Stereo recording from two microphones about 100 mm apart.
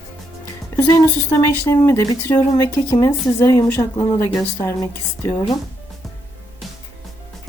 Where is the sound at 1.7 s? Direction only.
30° left (ahead or behind).